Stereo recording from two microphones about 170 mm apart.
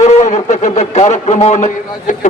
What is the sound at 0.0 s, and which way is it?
A man's voice, 45° left (ahead or behind).